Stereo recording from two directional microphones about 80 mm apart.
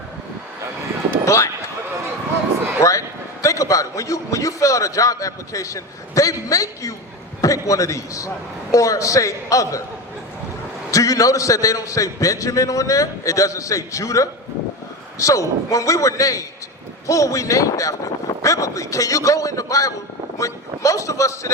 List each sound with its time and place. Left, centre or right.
1.2 s speech: left
2.8 s a man's voice: left
10.9 s a man's voice: left